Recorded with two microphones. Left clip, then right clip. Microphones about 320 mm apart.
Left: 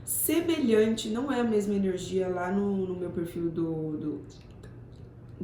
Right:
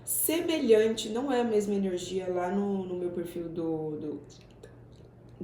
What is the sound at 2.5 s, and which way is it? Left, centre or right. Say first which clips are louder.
Speech: left 1 dB; right.